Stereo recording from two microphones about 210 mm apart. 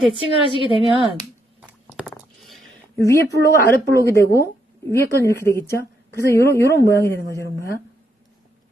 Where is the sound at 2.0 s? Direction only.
Centre (ahead or behind).